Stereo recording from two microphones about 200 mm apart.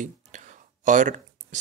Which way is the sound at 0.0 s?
40° right (ahead or behind).